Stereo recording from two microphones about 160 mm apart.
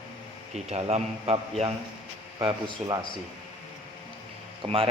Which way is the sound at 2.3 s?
25° right (ahead or behind).